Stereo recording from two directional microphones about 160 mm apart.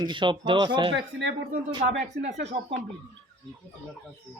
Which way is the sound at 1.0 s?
90° right.